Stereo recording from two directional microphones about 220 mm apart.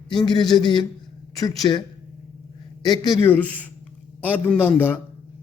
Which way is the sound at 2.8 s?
20° left (ahead or behind).